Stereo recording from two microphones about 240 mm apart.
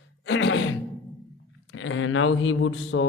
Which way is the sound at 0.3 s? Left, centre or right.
Left.